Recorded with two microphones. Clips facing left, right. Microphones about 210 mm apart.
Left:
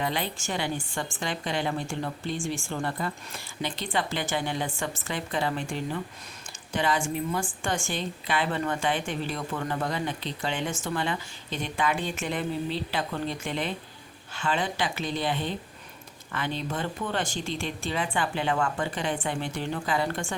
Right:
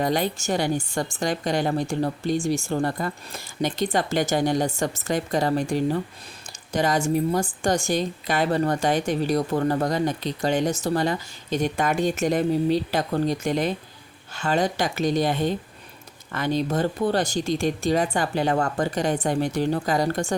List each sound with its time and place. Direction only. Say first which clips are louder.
0.0 s a woman's voice: right 7 dB; 40° right (ahead or behind)